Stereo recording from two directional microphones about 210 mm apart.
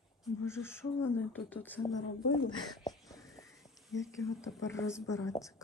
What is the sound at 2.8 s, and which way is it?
Wheeze, 15° left (ahead or behind).